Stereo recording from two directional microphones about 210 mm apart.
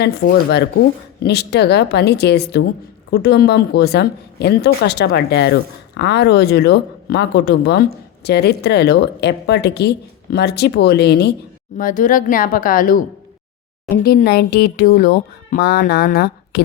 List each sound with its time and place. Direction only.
0.0 s speech: 50° left (ahead or behind)
11.8 s a woman's voice: 40° left (ahead or behind)